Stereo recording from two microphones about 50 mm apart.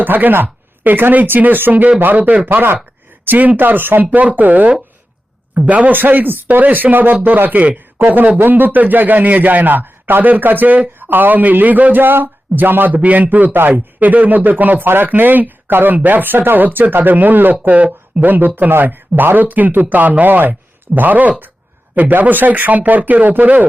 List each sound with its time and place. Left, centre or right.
0.0 s a man's voice: right
2.5 s speech: right
4.1 s speech: right
7.9 s speech: right